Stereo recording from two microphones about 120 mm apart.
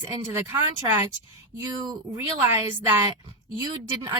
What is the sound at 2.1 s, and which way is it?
Speech, 20° right (ahead or behind).